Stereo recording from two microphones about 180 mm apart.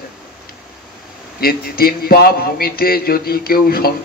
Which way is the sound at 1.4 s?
55° left (ahead or behind).